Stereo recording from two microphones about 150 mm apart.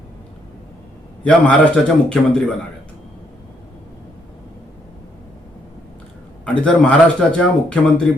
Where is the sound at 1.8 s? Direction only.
5° left (ahead or behind).